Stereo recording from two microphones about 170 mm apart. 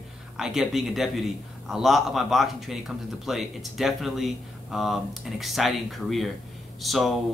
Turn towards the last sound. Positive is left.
turn(degrees=0)  # may be behind; listen again after turning